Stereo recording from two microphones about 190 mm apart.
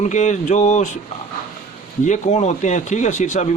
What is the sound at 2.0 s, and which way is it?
A man's voice, 40° left (ahead or behind).